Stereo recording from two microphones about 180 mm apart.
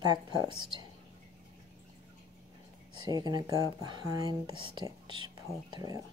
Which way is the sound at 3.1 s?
20° right (ahead or behind).